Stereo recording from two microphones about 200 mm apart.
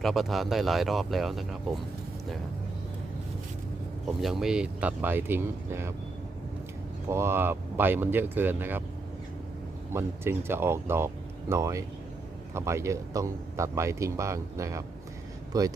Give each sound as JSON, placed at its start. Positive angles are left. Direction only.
{"t": 0.0, "sound": "speech", "side_deg": 0}
{"t": 4.2, "sound": "speech", "side_deg": 0}
{"t": 7.1, "sound": "speech", "side_deg": -15}
{"t": 9.9, "sound": "speech", "side_deg": -10}